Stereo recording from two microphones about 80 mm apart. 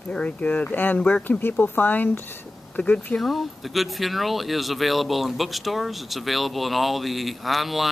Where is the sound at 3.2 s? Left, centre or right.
Centre.